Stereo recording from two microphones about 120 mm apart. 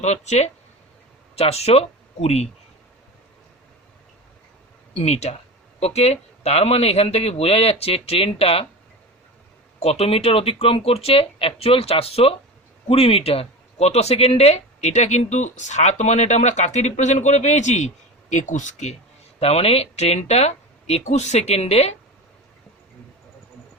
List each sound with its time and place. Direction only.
0.0 s speech: 70° left (ahead or behind)
1.4 s speech: 60° left (ahead or behind)
4.9 s a man's voice: 65° left (ahead or behind)
9.8 s speech: 60° left (ahead or behind); by 18.9 s 85° left
19.4 s a man's voice: 60° left (ahead or behind)